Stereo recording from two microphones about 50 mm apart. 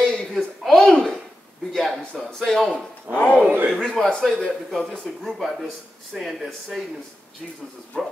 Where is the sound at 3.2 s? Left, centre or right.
Left.